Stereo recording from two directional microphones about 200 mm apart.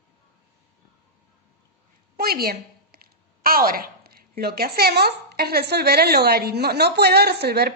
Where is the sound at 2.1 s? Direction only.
50° right (ahead or behind).